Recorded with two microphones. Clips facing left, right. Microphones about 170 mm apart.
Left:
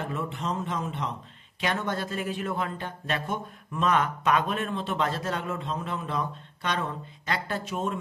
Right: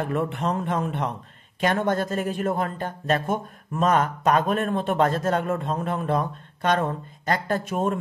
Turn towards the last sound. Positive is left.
turn(degrees=-50)  # may be behind; listen again after turning